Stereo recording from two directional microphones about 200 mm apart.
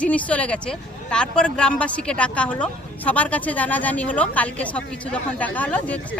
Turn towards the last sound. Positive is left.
turn(degrees=5)  # may be behind; listen again after turning